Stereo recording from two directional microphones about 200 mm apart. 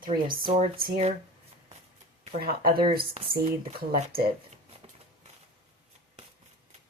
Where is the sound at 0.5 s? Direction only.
45° right (ahead or behind).